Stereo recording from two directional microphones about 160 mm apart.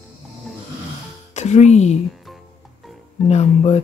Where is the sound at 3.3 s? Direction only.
40° left (ahead or behind).